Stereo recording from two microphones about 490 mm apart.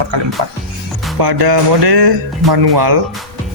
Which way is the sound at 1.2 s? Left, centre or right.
Right.